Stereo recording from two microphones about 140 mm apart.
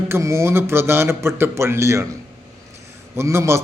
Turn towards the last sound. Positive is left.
turn(degrees=-20)  # may be behind; listen again after turning